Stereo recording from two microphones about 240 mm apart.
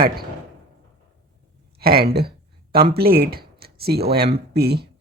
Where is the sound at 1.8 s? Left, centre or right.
Right.